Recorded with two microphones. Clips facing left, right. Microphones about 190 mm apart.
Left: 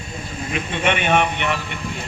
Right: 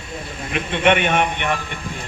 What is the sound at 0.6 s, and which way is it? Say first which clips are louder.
Speech: right 5 dB; 55° right (ahead or behind).